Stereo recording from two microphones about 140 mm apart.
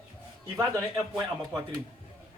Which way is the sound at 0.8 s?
25° right (ahead or behind).